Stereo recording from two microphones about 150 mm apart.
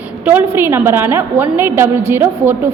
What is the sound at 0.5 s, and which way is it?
A woman's voice, 15° right (ahead or behind).